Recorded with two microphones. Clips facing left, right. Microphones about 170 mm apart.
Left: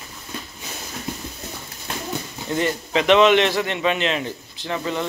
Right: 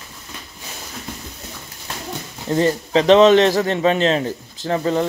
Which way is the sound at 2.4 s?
35° right (ahead or behind).